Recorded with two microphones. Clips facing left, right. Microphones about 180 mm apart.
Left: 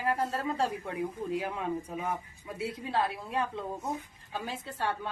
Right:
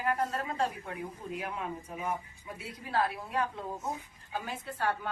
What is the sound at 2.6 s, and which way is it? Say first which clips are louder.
Speech: left 1 dB; 25° left (ahead or behind).